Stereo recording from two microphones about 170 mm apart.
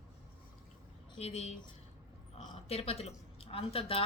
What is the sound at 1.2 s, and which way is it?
Speech, 40° left (ahead or behind).